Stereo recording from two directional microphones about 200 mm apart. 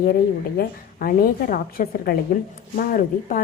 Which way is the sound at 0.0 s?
50° left (ahead or behind).